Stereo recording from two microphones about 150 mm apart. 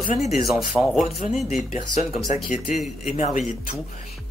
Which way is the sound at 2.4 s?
55° left (ahead or behind).